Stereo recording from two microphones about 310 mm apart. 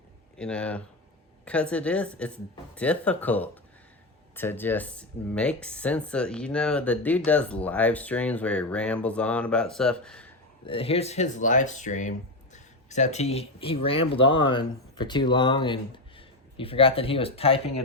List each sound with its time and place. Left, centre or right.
0.3 s speech: centre
10.7 s speech: centre